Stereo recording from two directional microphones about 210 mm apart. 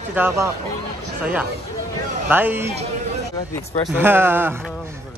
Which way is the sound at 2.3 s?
10° right (ahead or behind).